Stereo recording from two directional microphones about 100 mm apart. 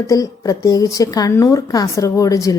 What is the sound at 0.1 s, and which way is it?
A woman's voice, 35° left (ahead or behind).